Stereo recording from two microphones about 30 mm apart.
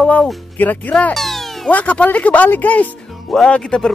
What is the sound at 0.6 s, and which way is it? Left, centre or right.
Speech, left.